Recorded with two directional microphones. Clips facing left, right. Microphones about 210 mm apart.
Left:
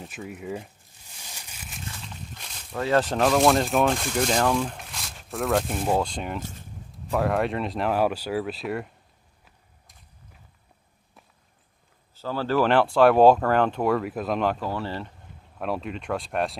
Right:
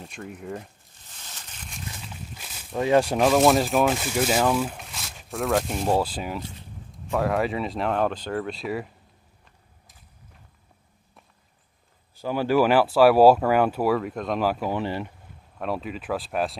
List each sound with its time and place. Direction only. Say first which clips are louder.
0.0 s speech: left 1 dB; 5° left (ahead or behind)
1.1 s a sound: even; 10° left (ahead or behind)
2.1 s walk: right 1 dB; 5° right (ahead or behind)
2.7 s speech: right 3 dB; 15° right (ahead or behind)
6.4 s speech: left 1 dB; 45° left (ahead or behind)
7.1 s speech: even; centre (ahead or behind)
12.2 s speech: right 3 dB; 15° right (ahead or behind)
14.7 s speech: right 3 dB; 15° right (ahead or behind)
15.6 s speech: even; centre (ahead or behind)